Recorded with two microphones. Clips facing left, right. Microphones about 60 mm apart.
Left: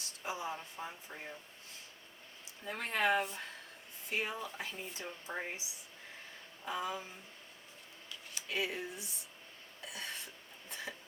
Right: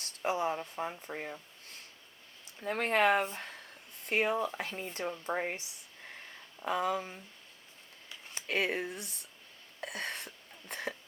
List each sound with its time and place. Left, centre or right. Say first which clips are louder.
0.0 s speech: right 8 dB; right
4.0 s speech: right 8 dB; right
6.7 s speech: right 7 dB; right
8.4 s speech: right 6 dB; right
9.8 s a sound: right 6 dB; right